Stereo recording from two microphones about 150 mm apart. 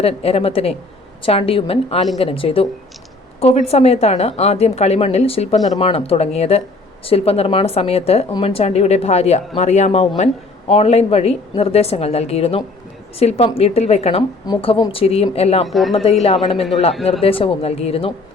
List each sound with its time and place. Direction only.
0.0 s a woman's voice: 40° left (ahead or behind)
15.6 s speech: centre (ahead or behind)
16.2 s a woman's voice: 40° left (ahead or behind)